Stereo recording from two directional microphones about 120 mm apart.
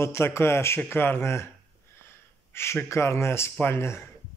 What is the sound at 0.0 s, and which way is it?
A man's voice, 20° left (ahead or behind).